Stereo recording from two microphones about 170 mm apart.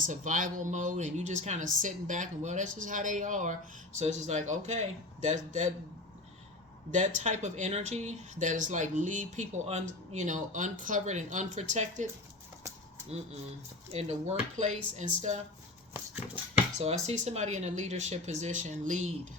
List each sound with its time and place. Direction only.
0.0 s speech: 50° right (ahead or behind)
6.9 s speech: 45° right (ahead or behind)
13.9 s speech: 40° right (ahead or behind)
15.9 s a sound: 10° right (ahead or behind)
16.7 s speech: 40° right (ahead or behind)